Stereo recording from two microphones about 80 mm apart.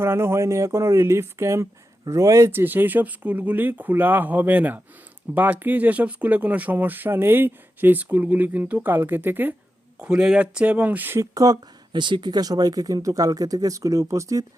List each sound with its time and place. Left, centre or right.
0.0 s speech: right
2.5 s speech: right
10.0 s speech: centre
11.2 s speech: right